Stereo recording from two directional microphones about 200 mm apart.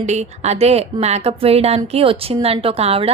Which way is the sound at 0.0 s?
35° right (ahead or behind).